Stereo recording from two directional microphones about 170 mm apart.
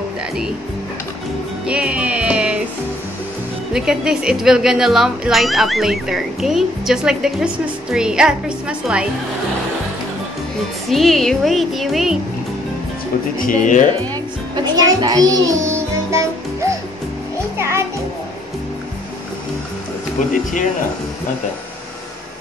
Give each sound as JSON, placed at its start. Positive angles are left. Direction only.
{"t": 1.7, "sound": "music", "side_deg": -5}
{"t": 3.7, "sound": "speech", "side_deg": -5}
{"t": 10.9, "sound": "speech", "side_deg": 0}
{"t": 13.4, "sound": "speech", "side_deg": 50}
{"t": 14.1, "sound": "a child's voice", "side_deg": -25}
{"t": 17.6, "sound": "music", "side_deg": -15}